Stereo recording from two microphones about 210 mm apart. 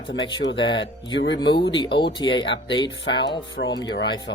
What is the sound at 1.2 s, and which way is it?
Speech, 60° left (ahead or behind).